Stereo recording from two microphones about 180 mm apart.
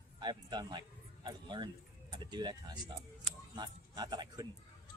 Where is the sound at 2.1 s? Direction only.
25° right (ahead or behind).